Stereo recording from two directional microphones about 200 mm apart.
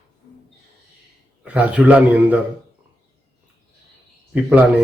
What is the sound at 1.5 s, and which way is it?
Speech, 5° right (ahead or behind).